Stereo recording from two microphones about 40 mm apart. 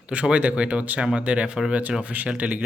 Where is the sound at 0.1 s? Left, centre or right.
Right.